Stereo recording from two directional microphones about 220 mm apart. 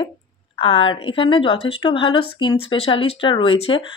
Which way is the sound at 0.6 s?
25° left (ahead or behind).